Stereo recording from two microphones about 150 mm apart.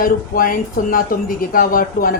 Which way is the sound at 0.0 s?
70° left (ahead or behind).